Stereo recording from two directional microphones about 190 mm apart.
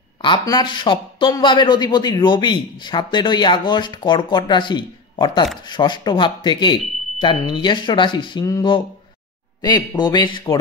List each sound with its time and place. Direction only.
0.2 s a man's voice: 25° left (ahead or behind)